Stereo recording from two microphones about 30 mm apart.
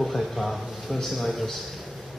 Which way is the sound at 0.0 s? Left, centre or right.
Centre.